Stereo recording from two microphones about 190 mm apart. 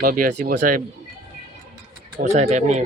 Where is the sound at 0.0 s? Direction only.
50° right (ahead or behind).